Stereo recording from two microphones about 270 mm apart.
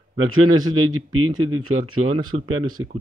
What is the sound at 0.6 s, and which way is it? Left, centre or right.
Speech, right.